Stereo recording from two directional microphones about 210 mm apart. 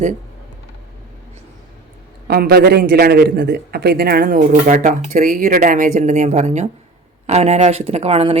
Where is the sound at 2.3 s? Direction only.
45° right (ahead or behind).